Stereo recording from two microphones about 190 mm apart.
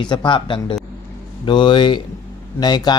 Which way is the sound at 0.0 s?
25° left (ahead or behind).